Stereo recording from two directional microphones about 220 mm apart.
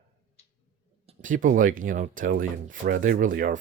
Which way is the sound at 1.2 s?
35° right (ahead or behind).